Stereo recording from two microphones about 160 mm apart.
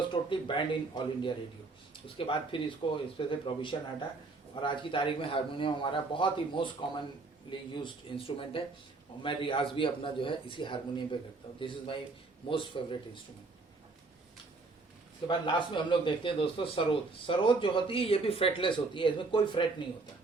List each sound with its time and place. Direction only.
0.1 s a man's voice: 30° left (ahead or behind)
15.3 s a man's voice: 30° left (ahead or behind)